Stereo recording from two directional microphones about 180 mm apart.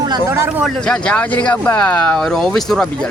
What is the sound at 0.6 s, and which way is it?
Speech, 5° left (ahead or behind).